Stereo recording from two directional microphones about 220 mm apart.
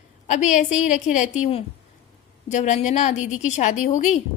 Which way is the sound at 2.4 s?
30° left (ahead or behind).